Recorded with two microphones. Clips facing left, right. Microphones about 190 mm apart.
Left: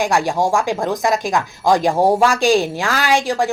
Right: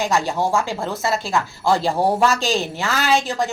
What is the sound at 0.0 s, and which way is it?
Speech, 15° left (ahead or behind).